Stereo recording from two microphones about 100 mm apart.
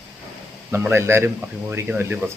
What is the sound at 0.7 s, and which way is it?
Speech, 25° right (ahead or behind).